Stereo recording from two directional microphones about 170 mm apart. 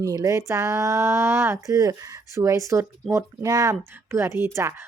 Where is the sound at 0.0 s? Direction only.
20° right (ahead or behind).